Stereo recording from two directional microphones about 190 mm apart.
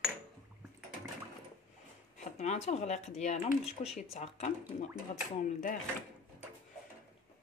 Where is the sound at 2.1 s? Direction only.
35° left (ahead or behind).